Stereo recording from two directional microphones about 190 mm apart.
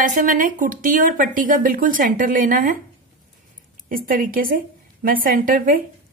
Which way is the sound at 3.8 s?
45° right (ahead or behind).